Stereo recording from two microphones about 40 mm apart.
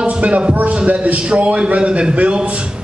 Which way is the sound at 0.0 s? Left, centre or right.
Right.